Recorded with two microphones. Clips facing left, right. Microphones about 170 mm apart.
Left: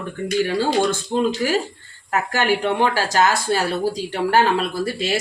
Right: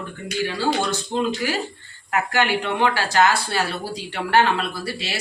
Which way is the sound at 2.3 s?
45° left (ahead or behind).